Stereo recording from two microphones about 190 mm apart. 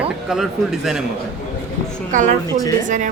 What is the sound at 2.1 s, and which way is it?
Speech, 40° right (ahead or behind).